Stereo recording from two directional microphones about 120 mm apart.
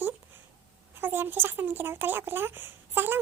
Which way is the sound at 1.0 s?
15° right (ahead or behind).